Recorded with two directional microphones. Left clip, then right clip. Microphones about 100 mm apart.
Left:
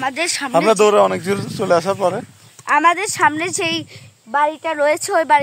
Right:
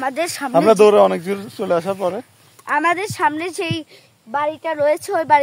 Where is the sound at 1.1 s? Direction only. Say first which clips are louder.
Left 3 dB; 55° left (ahead or behind).